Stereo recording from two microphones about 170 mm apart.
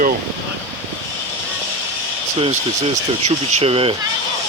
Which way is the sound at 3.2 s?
35° right (ahead or behind).